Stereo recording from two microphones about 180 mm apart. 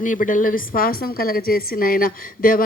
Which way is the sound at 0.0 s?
50° left (ahead or behind).